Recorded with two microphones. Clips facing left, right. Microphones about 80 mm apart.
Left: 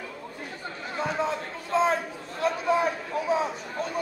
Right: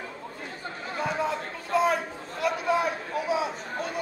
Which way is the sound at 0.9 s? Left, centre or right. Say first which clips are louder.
Even; left.